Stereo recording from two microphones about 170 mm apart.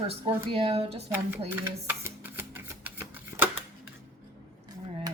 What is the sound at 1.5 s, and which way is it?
Speech, 10° right (ahead or behind).